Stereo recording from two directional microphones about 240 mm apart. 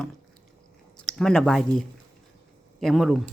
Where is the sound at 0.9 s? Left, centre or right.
Centre.